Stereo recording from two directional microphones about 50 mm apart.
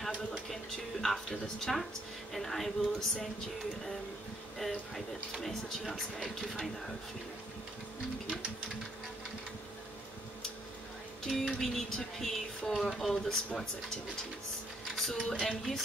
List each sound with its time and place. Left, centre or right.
1.0 s speech: centre
4.6 s speech: centre
11.2 s speech: centre
15.0 s a sound: centre
15.2 s speech: centre